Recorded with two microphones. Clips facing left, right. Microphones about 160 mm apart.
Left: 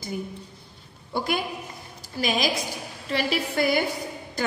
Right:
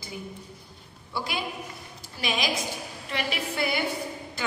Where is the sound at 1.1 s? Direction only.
50° left (ahead or behind).